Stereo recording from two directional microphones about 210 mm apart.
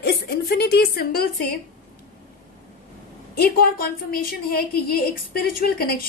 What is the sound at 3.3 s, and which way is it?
A woman's voice, 45° left (ahead or behind).